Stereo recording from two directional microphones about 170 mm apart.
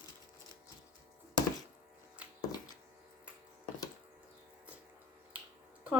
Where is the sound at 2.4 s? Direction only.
25° left (ahead or behind).